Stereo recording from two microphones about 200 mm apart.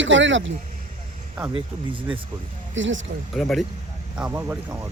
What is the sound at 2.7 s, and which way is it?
Speech, 70° right (ahead or behind).